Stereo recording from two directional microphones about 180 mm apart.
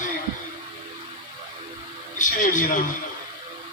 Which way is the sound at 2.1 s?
45° left (ahead or behind).